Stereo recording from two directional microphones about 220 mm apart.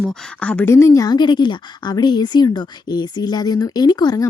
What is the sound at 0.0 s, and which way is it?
A woman's voice, 5° left (ahead or behind).